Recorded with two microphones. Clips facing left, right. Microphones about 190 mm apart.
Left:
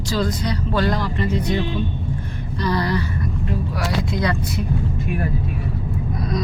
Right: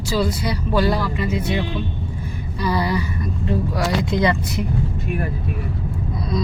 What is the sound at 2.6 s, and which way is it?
Speech, 10° right (ahead or behind).